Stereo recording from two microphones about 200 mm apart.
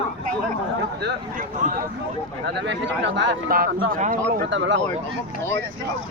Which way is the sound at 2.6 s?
60° right (ahead or behind).